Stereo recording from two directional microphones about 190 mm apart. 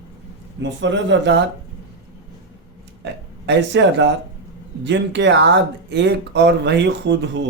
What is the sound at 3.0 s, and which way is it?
Speech, 65° right (ahead or behind).